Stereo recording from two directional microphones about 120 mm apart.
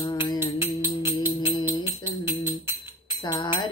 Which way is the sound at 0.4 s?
20° right (ahead or behind).